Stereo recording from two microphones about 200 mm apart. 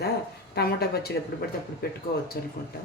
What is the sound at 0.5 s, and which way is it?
Speech, 50° left (ahead or behind).